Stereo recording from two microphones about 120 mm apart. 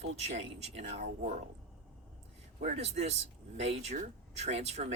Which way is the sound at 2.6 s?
60° right (ahead or behind).